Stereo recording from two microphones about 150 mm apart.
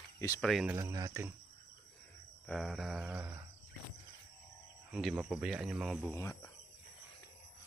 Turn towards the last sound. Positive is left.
turn(degrees=20)  # may be behind; listen again after turning